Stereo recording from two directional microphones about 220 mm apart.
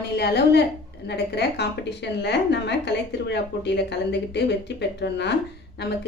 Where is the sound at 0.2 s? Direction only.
50° left (ahead or behind).